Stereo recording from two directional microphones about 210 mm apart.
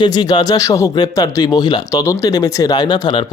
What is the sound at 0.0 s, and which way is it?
Speech, 20° left (ahead or behind).